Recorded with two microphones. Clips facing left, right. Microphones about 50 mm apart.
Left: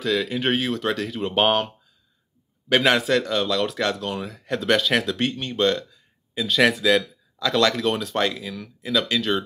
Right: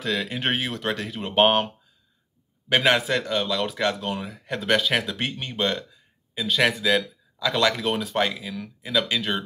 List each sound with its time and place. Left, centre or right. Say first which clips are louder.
0.4 s speech: left 3 dB; right
2.7 s speech: left 2 dB; centre